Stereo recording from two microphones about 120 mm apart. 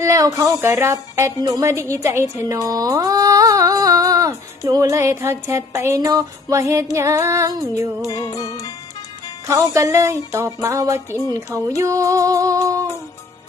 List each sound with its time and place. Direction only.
0.0 s music: 25° right (ahead or behind)
1.4 s a woman's voice: 30° right (ahead or behind)
6.9 s music: 25° right (ahead or behind)
8.0 s music: 30° left (ahead or behind)
9.7 s music: 25° right (ahead or behind)